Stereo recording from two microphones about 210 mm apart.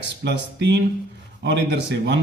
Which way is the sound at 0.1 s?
55° right (ahead or behind).